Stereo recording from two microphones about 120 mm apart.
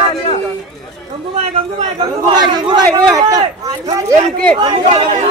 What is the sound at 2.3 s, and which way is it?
Speech, 35° right (ahead or behind).